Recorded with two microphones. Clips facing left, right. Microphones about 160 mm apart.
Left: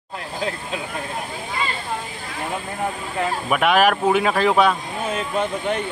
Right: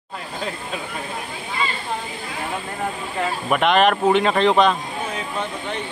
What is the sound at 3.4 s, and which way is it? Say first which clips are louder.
Speech: right 1 dB; 5° left (ahead or behind).